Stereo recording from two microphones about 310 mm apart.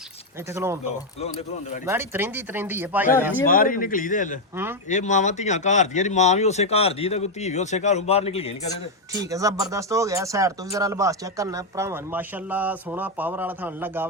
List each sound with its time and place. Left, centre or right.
0.5 s speech: centre
1.2 s speech: centre
1.9 s speech: centre
3.4 s speech: left
9.3 s speech: centre